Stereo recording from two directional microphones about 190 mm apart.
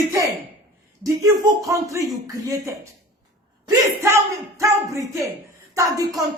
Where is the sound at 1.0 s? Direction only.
15° right (ahead or behind).